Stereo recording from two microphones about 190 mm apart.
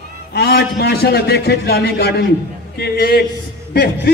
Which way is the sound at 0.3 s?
60° left (ahead or behind).